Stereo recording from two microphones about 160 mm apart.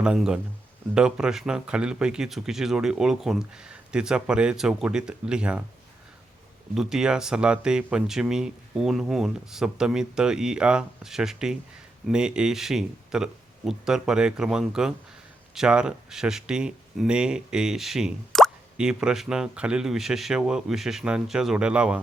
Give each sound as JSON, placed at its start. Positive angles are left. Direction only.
{"t": 0.0, "sound": "speech", "side_deg": -5}
{"t": 6.7, "sound": "speech", "side_deg": -5}